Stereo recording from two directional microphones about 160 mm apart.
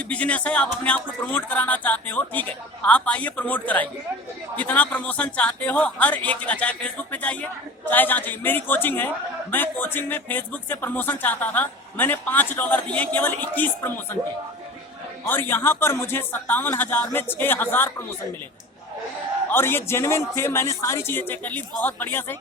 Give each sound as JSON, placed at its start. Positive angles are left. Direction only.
{"t": 0.0, "sound": "speech", "side_deg": 10}
{"t": 15.2, "sound": "speech", "side_deg": 15}
{"t": 19.5, "sound": "speech", "side_deg": 15}